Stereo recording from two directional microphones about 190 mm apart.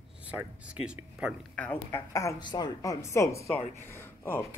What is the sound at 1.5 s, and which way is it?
A woman's voice, 10° left (ahead or behind).